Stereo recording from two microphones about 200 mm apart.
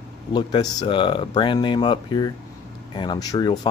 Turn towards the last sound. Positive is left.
turn(degrees=20)  # may be behind; listen again after turning